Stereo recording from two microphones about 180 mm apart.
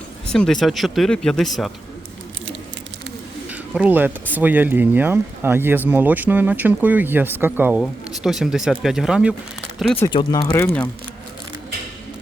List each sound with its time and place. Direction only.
0.3 s speech: 5° left (ahead or behind)
3.5 s speech: 10° right (ahead or behind)
10.1 s speech: 25° left (ahead or behind)